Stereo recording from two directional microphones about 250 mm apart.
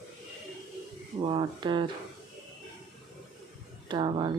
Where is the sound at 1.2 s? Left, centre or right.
Right.